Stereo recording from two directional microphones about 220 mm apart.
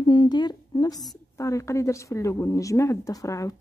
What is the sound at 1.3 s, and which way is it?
Speech, 15° left (ahead or behind).